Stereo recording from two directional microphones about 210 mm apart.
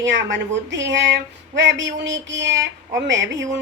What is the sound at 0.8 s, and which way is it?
A woman's voice, 60° right (ahead or behind).